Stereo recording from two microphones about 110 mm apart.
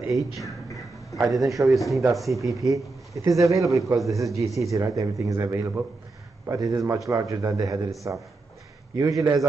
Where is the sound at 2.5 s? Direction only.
30° right (ahead or behind).